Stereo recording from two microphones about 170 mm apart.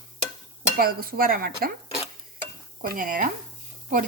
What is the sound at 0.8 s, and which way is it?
Speech, 60° right (ahead or behind).